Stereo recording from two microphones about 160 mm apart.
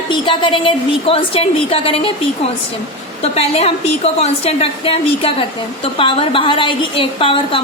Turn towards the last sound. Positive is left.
turn(degrees=35)  # may be behind; listen again after turning